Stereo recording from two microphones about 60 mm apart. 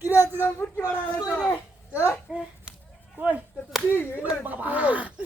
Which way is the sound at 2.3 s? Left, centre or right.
Centre.